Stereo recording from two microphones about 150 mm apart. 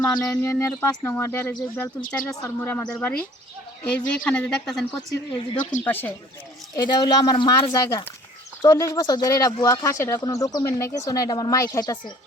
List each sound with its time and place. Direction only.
0.0 s a woman's voice: 15° left (ahead or behind)
5.8 s a woman's voice: 15° left (ahead or behind)
6.7 s speech: 30° left (ahead or behind)